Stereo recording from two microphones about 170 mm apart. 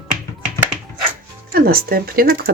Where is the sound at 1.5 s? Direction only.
60° right (ahead or behind).